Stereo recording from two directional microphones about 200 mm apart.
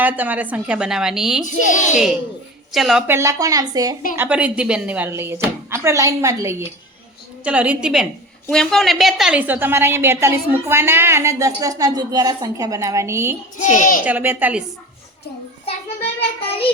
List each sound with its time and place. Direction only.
0.0 s a woman's voice: 10° right (ahead or behind)
1.5 s a woman's voice: 40° left (ahead or behind)
2.7 s a woman's voice: centre (ahead or behind)
3.1 s a woman's voice: 15° right (ahead or behind)
13.6 s a woman's voice: 40° left (ahead or behind)
14.0 s a woman's voice: 10° right (ahead or behind)
16.5 s a child's voice: 25° left (ahead or behind)